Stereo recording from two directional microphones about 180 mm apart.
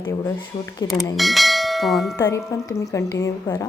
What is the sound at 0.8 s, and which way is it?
Bell, centre (ahead or behind).